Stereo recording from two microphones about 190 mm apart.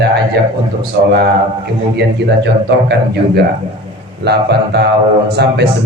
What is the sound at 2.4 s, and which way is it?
A man's voice, 65° right (ahead or behind).